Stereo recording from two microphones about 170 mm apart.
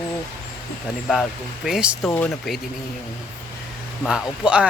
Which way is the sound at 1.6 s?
5° right (ahead or behind).